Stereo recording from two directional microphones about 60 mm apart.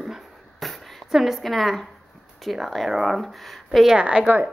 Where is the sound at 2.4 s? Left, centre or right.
Centre.